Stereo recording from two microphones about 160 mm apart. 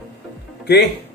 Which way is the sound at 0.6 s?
90° left.